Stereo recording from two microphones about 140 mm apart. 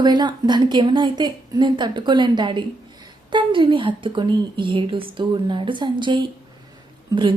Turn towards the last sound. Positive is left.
turn(degrees=-30)  # may be behind; listen again after turning